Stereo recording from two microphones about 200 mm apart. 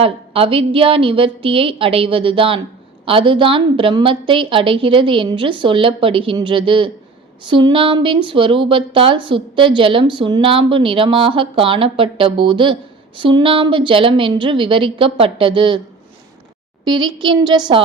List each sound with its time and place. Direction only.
0.0 s a woman's voice: 30° right (ahead or behind)
16.8 s a woman's voice: 20° right (ahead or behind)